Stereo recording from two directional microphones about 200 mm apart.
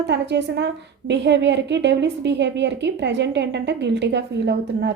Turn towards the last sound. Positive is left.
turn(degrees=-60)  # may be behind; listen again after turning